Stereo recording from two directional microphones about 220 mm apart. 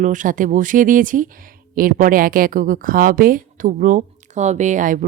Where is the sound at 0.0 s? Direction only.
35° right (ahead or behind).